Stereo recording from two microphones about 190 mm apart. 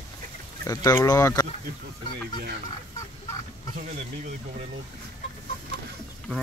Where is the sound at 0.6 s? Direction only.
20° left (ahead or behind).